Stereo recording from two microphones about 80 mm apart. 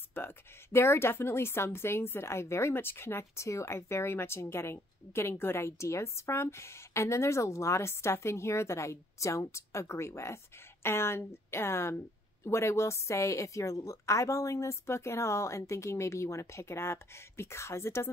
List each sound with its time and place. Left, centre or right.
0.1 s a woman's voice: left